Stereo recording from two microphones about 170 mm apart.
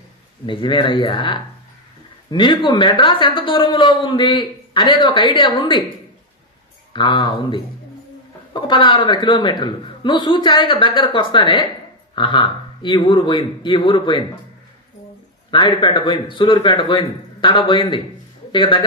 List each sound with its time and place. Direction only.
0.5 s a woman's voice: 30° left (ahead or behind)
6.9 s a woman's voice: 25° left (ahead or behind)
15.5 s a woman's voice: 30° left (ahead or behind)